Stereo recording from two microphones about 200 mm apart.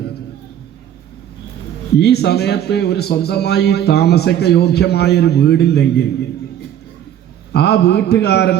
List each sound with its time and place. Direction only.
2.0 s a man's voice: 55° left (ahead or behind)
7.5 s a man's voice: 55° left (ahead or behind)